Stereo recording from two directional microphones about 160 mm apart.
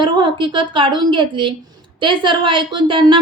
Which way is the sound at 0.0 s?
30° right (ahead or behind).